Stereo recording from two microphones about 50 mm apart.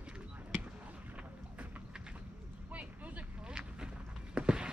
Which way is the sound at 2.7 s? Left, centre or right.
Right.